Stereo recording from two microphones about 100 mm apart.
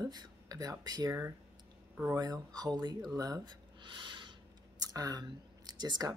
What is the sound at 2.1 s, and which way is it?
Speech, 40° right (ahead or behind).